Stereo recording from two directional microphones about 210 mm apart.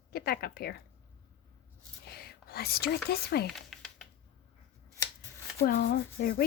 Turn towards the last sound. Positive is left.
turn(degrees=45)  # may be behind; listen again after turning